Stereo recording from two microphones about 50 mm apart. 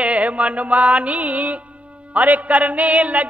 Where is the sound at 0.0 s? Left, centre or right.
Right.